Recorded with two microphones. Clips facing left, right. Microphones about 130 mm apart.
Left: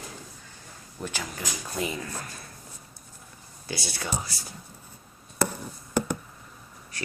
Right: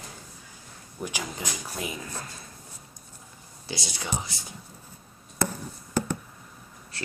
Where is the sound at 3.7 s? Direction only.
20° right (ahead or behind).